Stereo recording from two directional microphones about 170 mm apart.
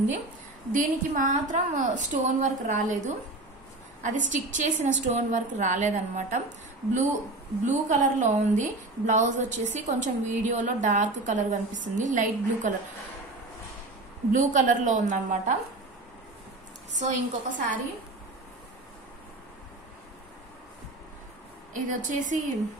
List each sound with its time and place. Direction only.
0.7 s a woman's voice: 50° right (ahead or behind)
7.6 s a woman's voice: 45° right (ahead or behind)
14.3 s a woman's voice: 50° right (ahead or behind)
17.0 s a woman's voice: 50° right (ahead or behind)
21.7 s a woman's voice: 50° right (ahead or behind)